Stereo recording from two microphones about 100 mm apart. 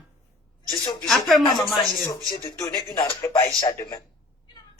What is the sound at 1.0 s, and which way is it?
Speech, centre (ahead or behind).